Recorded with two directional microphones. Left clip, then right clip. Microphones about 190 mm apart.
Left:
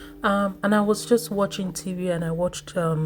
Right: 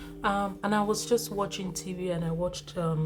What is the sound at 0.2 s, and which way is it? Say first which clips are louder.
Speech: left 6 dB; 20° left (ahead or behind).